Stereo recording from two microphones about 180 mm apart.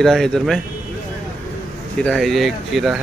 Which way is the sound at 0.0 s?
Centre (ahead or behind).